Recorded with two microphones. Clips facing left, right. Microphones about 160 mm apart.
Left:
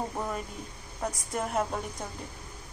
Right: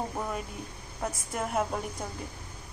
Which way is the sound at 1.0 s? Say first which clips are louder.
Left 1 dB; centre (ahead or behind).